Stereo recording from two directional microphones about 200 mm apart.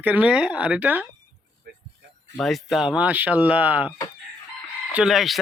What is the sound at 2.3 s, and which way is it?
Speech, centre (ahead or behind).